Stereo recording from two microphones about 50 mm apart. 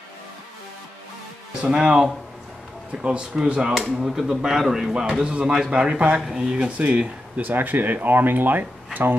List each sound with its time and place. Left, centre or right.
1.5 s speech: centre
3.9 s speech: centre
5.2 s speech: centre
7.5 s speech: right